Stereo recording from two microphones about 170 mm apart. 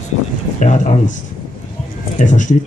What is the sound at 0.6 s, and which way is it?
Speech, 45° left (ahead or behind).